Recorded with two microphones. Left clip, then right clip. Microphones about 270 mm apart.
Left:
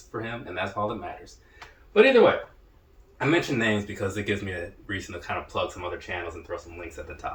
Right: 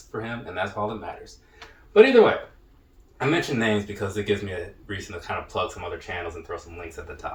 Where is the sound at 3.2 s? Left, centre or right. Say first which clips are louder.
Even; centre.